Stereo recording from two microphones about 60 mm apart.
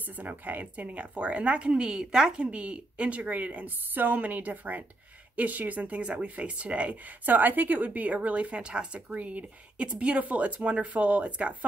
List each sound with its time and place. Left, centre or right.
0.0 s speech: right